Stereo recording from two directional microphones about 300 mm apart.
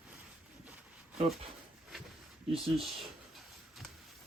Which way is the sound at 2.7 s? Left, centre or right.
Centre.